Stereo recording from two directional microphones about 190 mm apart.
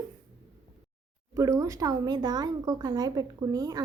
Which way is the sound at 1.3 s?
15° right (ahead or behind).